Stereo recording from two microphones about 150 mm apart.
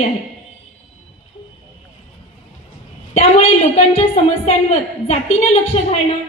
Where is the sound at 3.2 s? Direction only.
45° left (ahead or behind).